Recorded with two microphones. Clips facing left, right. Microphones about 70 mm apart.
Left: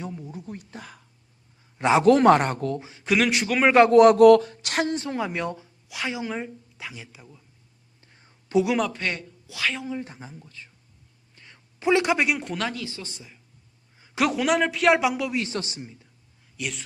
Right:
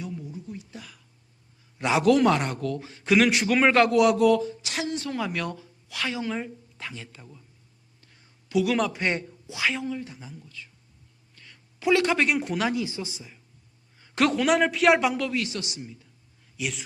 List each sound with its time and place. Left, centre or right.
0.3 s whispering: left
1.8 s a man's voice: left
3.0 s a man's voice: centre
3.8 s speech: left
4.9 s speech: left
8.0 s whispering: left
8.9 s speech: right
10.0 s a man's voice: left
11.3 s a sound: left
12.3 s speech: centre
13.1 s a man's voice: centre
15.4 s a man's voice: left
16.6 s speech: centre